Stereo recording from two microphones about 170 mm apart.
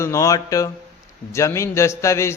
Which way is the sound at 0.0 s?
20° left (ahead or behind).